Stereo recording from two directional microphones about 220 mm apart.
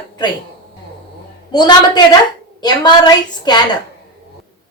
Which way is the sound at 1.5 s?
20° left (ahead or behind).